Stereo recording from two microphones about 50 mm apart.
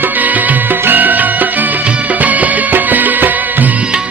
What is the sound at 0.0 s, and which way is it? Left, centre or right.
Music, right.